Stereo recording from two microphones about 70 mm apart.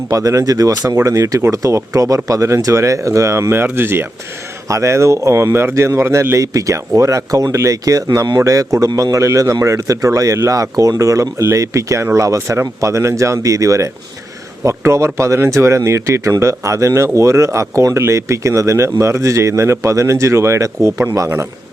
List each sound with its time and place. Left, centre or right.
0.1 s speech: right
4.7 s speech: right